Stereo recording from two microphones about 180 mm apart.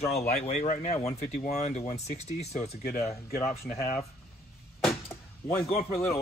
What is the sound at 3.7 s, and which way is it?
Speech, 50° left (ahead or behind).